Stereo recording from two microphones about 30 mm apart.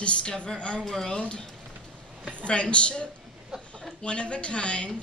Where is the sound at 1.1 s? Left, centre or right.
Left.